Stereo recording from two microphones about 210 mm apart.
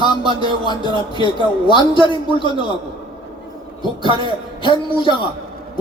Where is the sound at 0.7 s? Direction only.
20° left (ahead or behind).